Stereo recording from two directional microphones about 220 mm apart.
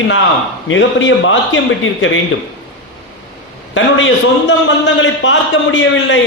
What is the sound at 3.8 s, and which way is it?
A man's voice, 60° left (ahead or behind).